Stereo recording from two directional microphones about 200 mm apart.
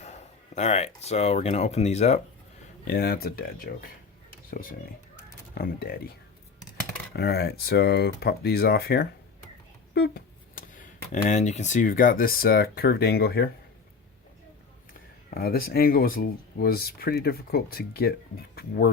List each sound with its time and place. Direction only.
0.0 s speech: 35° left (ahead or behind)
2.8 s speech: 50° left (ahead or behind)
5.5 s speech: 50° left (ahead or behind)
7.1 s speech: 55° left (ahead or behind)
15.4 s speech: 50° left (ahead or behind)